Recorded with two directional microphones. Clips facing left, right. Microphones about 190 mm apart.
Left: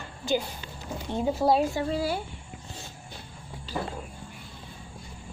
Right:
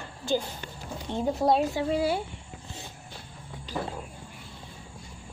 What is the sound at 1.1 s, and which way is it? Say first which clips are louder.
Speech: left 1 dB; 5° left (ahead or behind).